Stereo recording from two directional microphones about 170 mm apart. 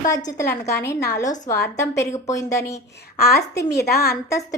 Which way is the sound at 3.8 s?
65° left (ahead or behind).